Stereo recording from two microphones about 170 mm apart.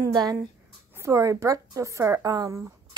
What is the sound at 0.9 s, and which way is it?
Speech, 15° right (ahead or behind).